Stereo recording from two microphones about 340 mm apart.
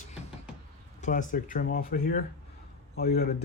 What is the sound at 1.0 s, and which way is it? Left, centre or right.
Speech, left.